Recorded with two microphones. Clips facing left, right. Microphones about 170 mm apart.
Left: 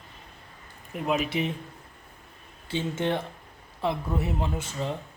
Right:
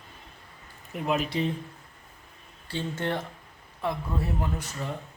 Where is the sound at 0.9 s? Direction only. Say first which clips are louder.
Left 1 dB; centre (ahead or behind).